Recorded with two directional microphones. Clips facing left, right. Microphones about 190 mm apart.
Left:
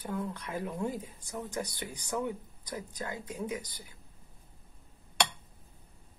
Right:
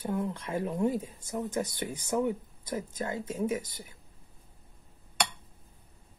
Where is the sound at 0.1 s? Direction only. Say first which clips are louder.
Right 3 dB; 25° right (ahead or behind).